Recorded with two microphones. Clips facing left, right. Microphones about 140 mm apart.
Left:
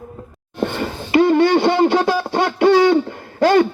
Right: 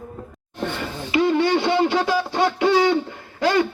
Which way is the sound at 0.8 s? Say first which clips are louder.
Left 6 dB; 55° left (ahead or behind).